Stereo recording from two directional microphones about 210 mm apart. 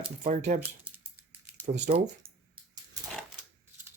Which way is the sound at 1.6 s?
35° right (ahead or behind).